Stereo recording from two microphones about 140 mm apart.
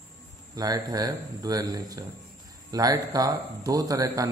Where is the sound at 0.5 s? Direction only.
25° right (ahead or behind).